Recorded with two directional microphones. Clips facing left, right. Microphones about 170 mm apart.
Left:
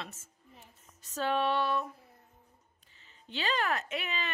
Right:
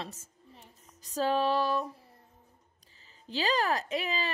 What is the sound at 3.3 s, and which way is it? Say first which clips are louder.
A woman's voice: right 3 dB; 35° right (ahead or behind).